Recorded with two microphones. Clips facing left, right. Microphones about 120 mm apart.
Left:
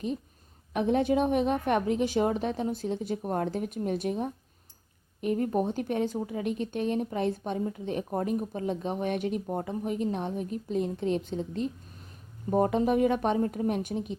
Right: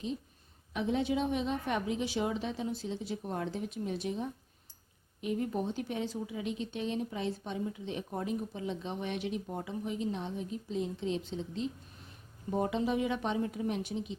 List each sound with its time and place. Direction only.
0.7 s speech: 55° left (ahead or behind)